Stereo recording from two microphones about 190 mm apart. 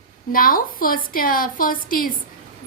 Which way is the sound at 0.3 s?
50° left (ahead or behind).